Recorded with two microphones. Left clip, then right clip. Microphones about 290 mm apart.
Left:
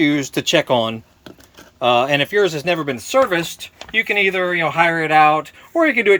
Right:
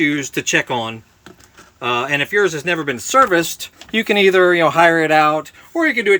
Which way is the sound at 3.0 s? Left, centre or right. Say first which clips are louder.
Right 5 dB; centre.